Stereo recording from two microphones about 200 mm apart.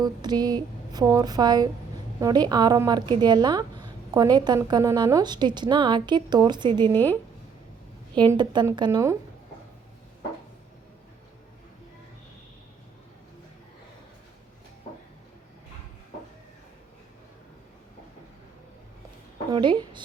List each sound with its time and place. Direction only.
0.0 s speech: 20° right (ahead or behind)
6.9 s speech: 10° left (ahead or behind)
8.2 s speech: 20° right (ahead or behind)
19.5 s a sound: 20° right (ahead or behind)